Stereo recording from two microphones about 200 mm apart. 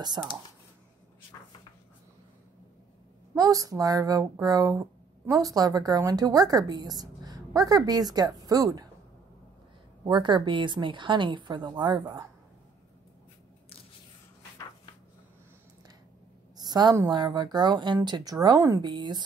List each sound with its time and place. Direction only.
0.2 s speech: 15° right (ahead or behind)
3.3 s speech: 15° right (ahead or behind)
10.0 s a woman's voice: 20° right (ahead or behind)
16.5 s a woman's voice: 20° right (ahead or behind)